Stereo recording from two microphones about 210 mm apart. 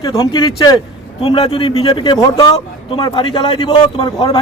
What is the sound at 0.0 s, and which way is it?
Speech, 20° left (ahead or behind).